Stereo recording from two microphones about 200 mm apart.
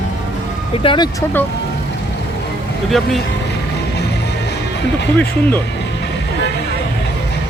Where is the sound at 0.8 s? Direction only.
20° left (ahead or behind).